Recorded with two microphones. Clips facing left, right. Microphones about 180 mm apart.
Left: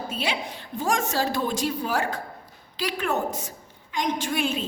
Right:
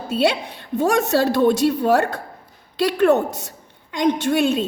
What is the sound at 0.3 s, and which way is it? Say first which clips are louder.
A woman's voice: right 8 dB; 65° right (ahead or behind).